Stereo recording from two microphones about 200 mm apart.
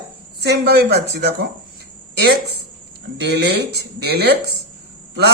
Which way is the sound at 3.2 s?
55° right (ahead or behind).